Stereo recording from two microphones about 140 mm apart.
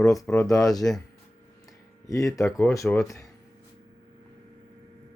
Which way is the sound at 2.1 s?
25° left (ahead or behind).